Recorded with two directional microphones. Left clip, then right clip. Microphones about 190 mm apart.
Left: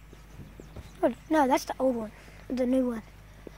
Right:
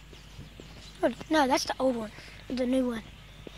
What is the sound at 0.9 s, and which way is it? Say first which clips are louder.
Speech: left 1 dB; centre (ahead or behind).